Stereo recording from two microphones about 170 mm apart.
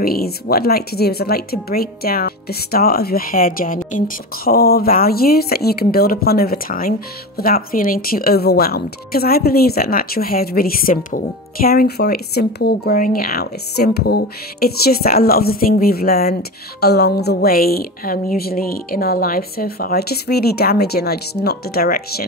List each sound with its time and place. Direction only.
0.0 s speech: 60° left (ahead or behind)
4.5 s speech: 65° left (ahead or behind)